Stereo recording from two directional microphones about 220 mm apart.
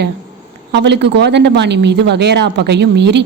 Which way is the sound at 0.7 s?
50° right (ahead or behind).